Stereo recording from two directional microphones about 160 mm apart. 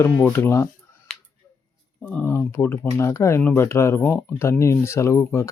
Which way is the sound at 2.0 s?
10° left (ahead or behind).